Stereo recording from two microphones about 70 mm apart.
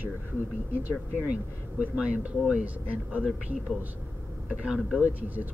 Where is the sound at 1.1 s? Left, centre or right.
Right.